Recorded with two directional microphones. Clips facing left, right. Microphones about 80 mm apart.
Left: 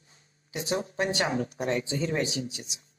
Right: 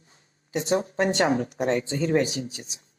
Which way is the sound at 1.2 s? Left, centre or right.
Right.